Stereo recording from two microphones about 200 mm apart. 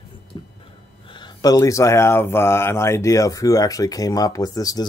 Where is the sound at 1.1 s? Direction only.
20° left (ahead or behind).